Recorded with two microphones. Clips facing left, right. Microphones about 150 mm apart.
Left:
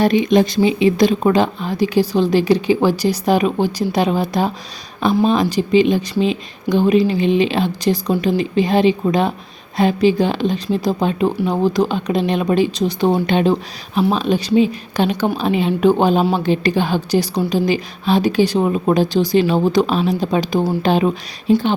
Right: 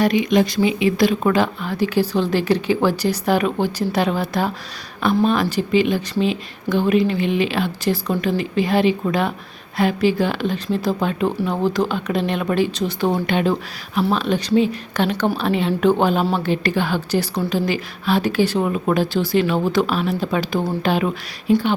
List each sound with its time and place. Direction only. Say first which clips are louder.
0.0 s speech: left 3 dB; 25° left (ahead or behind)